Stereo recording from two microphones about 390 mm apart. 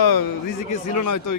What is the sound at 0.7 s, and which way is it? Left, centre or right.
Speech, left.